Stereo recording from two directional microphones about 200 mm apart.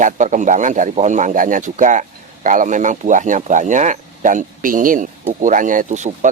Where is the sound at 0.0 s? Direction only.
40° right (ahead or behind).